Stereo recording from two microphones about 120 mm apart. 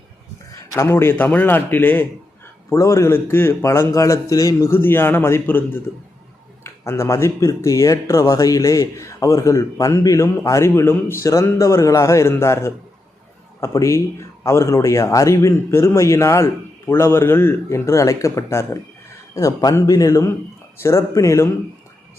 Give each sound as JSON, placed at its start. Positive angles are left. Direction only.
{"t": 0.7, "sound": "speech", "side_deg": 20}